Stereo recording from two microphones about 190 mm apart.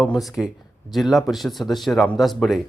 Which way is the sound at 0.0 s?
Centre (ahead or behind).